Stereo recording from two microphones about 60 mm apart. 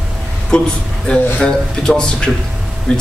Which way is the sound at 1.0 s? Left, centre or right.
Centre.